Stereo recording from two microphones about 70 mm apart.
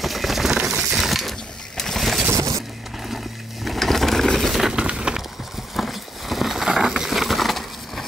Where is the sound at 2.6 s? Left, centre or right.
Centre.